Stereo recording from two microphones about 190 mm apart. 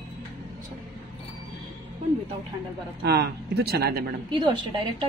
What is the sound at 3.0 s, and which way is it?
Speech, 60° right (ahead or behind).